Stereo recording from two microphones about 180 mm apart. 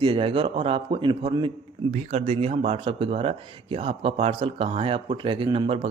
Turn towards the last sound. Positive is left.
turn(degrees=-35)  # may be behind; listen again after turning